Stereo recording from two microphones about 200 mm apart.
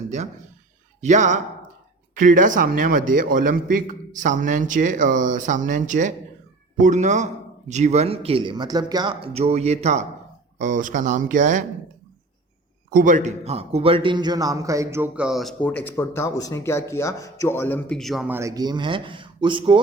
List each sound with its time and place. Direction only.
1.0 s speech: 40° right (ahead or behind)
12.9 s a man's voice: 40° right (ahead or behind); by 18.3 s centre (ahead or behind)
18.3 s speech: 15° right (ahead or behind)